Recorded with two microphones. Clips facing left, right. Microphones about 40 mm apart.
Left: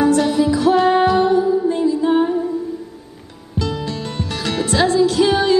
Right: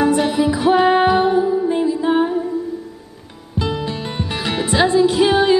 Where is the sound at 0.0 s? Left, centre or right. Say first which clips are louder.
Left 1 dB; centre.